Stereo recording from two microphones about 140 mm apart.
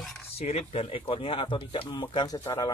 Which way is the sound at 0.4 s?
50° left (ahead or behind).